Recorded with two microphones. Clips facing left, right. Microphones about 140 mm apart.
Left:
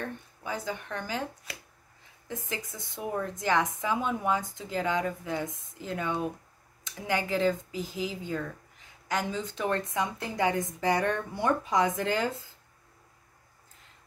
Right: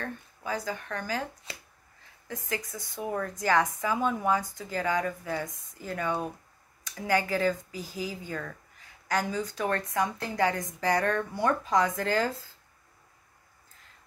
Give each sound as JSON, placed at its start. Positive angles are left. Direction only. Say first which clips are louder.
{"t": 0.4, "sound": "a woman's voice", "louder": "right 2 dB", "side_deg": 20}
{"t": 2.2, "sound": "a woman's voice", "louder": "right 2 dB", "side_deg": 20}